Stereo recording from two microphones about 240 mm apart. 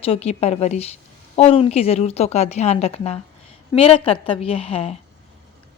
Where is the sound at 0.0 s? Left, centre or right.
Left.